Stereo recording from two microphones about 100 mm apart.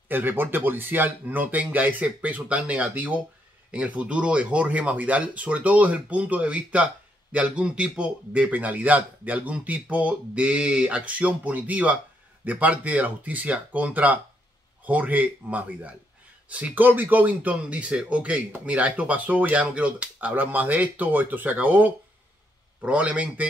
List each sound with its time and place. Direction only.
0.1 s a man's voice: 20° right (ahead or behind)